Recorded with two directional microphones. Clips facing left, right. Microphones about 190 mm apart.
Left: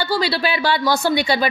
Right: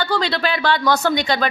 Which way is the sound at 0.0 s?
10° left (ahead or behind).